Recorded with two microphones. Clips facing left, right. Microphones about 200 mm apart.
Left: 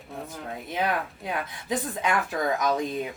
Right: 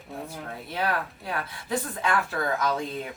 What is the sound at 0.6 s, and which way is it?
A woman's voice, 20° left (ahead or behind).